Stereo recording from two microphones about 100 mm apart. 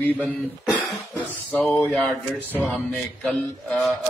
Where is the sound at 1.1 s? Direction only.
15° left (ahead or behind).